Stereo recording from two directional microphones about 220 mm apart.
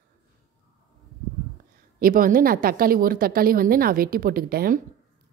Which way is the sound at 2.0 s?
40° right (ahead or behind).